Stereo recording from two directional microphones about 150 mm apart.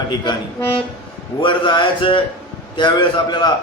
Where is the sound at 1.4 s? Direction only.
30° left (ahead or behind).